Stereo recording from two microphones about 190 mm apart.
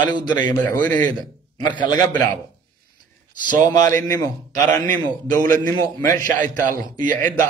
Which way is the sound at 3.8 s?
15° left (ahead or behind).